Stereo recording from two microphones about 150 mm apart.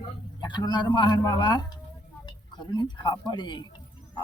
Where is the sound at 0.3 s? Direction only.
30° left (ahead or behind).